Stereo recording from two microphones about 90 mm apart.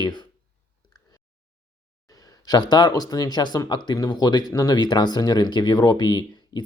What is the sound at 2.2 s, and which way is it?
Speech, 45° left (ahead or behind).